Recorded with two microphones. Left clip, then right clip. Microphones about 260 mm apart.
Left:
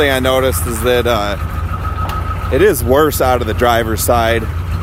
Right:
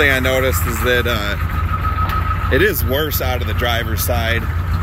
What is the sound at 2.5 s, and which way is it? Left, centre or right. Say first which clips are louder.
Speech: left 6 dB; centre.